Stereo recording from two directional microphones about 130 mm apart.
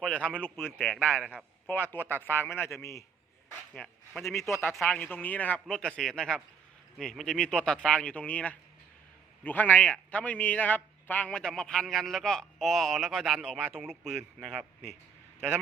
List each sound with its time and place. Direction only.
0.0 s a man's voice: 10° left (ahead or behind)
0.8 s a man's voice: 5° left (ahead or behind)
1.2 s a man's voice: 10° right (ahead or behind)
1.6 s a man's voice: 15° left (ahead or behind)
3.8 s a man's voice: 10° left (ahead or behind)